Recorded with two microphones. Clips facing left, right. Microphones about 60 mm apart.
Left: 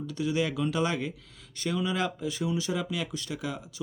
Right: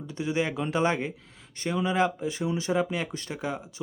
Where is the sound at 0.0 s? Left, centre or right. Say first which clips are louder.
Even; right.